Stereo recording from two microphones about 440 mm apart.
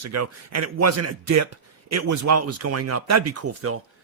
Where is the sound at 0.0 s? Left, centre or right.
Right.